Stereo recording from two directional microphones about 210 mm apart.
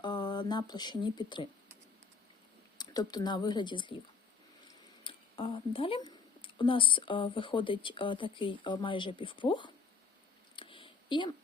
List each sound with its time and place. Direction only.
0.0 s speech: 20° left (ahead or behind)
2.7 s speech: 20° left (ahead or behind)
10.5 s a sound: 25° left (ahead or behind)